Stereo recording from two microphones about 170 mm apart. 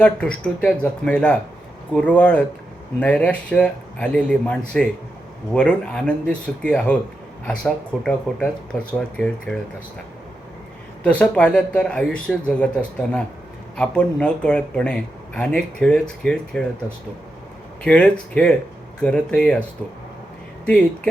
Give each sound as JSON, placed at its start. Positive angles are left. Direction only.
{"t": 0.0, "sound": "speech", "side_deg": 5}
{"t": 11.0, "sound": "speech", "side_deg": 5}
{"t": 17.8, "sound": "speech", "side_deg": 5}
{"t": 20.7, "sound": "speech", "side_deg": 5}